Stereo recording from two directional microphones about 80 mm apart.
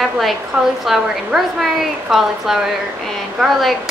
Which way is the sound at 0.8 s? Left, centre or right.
Centre.